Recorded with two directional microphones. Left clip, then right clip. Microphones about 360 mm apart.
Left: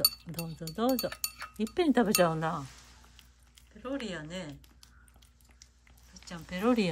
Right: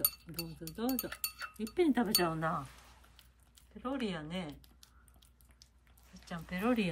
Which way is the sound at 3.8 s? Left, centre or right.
Centre.